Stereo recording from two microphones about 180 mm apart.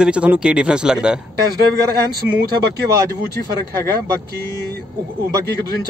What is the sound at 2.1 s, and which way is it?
Speech, 60° right (ahead or behind).